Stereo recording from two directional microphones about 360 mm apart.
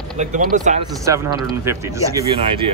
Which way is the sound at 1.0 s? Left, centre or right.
Centre.